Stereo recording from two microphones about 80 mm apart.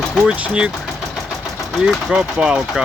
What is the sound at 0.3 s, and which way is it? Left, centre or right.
Speech, centre.